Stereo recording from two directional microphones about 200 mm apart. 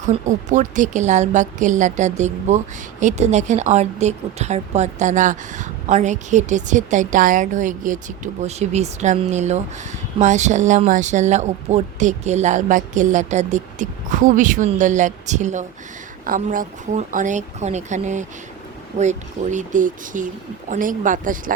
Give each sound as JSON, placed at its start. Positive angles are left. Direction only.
{"t": 0.0, "sound": "a woman's voice", "side_deg": -35}